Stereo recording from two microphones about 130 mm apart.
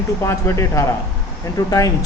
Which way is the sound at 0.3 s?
20° left (ahead or behind).